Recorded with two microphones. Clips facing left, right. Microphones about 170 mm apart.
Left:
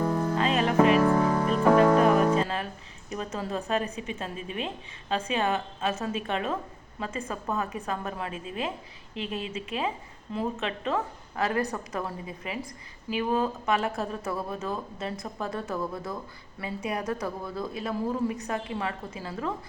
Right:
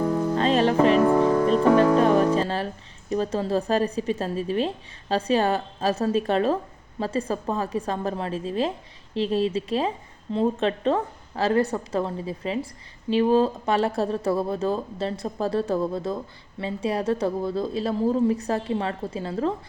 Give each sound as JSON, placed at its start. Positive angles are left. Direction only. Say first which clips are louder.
{"t": 0.3, "sound": "music", "louder": "right 3 dB", "side_deg": -35}
{"t": 2.0, "sound": "music", "louder": "right 2 dB", "side_deg": -30}
{"t": 3.1, "sound": "a woman's voice", "louder": "right 8 dB", "side_deg": -30}